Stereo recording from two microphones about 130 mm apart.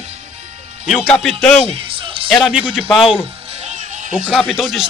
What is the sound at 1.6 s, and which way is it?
Music, 45° right (ahead or behind).